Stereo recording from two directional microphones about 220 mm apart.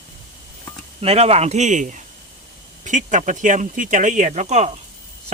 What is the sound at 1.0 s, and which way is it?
Speech, 25° right (ahead or behind).